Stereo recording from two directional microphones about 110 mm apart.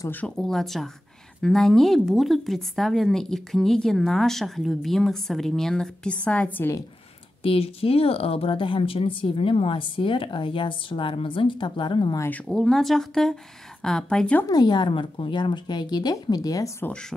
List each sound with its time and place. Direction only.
0.4 s speech: centre (ahead or behind)
7.4 s speech: 60° left (ahead or behind); by 12.2 s 45° left (ahead or behind)
12.3 s speech: 10° left (ahead or behind)
14.4 s speech: 35° left (ahead or behind)
16.8 s speech: 10° left (ahead or behind)